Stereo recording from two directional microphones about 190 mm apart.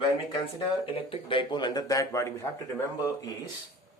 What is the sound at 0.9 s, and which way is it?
A man's voice, 30° left (ahead or behind).